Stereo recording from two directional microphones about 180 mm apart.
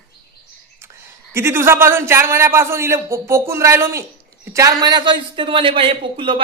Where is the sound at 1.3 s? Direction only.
15° right (ahead or behind).